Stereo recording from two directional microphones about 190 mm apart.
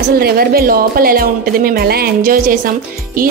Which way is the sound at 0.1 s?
50° right (ahead or behind).